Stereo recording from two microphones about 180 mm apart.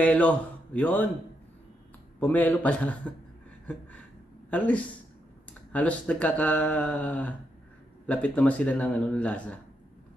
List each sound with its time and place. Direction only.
0.0 s a man's voice: 5° left (ahead or behind)
2.1 s speech: 10° left (ahead or behind)
4.5 s speech: 10° left (ahead or behind)